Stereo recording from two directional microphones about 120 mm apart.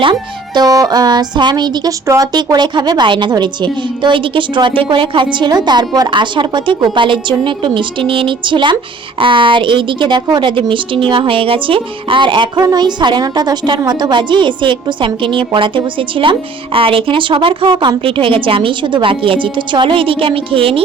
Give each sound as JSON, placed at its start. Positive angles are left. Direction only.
{"t": 0.0, "sound": "a woman's voice", "side_deg": -40}